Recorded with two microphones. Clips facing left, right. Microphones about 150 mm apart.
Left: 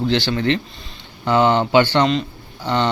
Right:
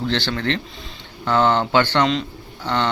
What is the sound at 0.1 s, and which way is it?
Speech, 10° left (ahead or behind).